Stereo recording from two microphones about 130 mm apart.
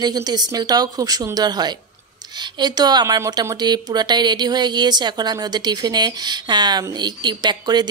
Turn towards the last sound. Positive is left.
turn(degrees=-30)  # may be behind; listen again after turning